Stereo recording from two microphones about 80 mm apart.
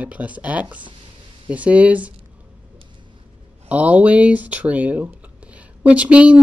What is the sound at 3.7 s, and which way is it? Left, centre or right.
Speech, centre.